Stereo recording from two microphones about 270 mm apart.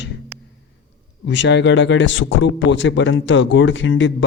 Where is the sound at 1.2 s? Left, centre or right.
Left.